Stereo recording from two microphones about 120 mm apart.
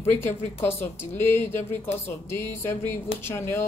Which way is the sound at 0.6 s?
20° left (ahead or behind).